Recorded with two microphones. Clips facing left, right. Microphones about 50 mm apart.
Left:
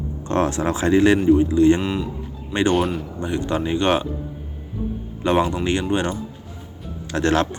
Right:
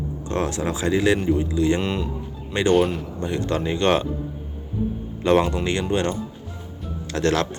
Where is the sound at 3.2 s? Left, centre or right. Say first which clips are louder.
Left 1 dB; centre.